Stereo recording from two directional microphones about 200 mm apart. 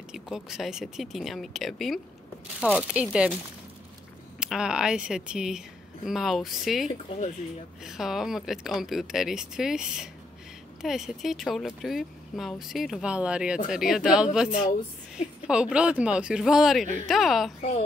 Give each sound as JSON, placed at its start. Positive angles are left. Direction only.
{"t": 0.1, "sound": "speech", "side_deg": 0}
{"t": 4.4, "sound": "speech", "side_deg": -5}
{"t": 6.9, "sound": "speech", "side_deg": 25}
{"t": 7.8, "sound": "speech", "side_deg": 0}
{"t": 17.6, "sound": "a woman's voice", "side_deg": 40}